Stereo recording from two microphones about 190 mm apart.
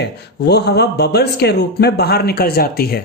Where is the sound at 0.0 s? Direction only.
60° left (ahead or behind).